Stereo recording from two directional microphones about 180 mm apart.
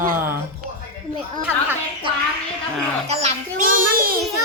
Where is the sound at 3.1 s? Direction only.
35° right (ahead or behind); by 4.2 s 55° right (ahead or behind).